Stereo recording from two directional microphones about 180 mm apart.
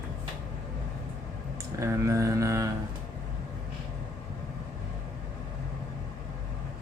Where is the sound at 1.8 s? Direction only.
15° right (ahead or behind).